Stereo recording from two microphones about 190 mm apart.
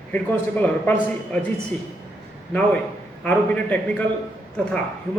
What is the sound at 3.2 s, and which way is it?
Speech, 10° left (ahead or behind).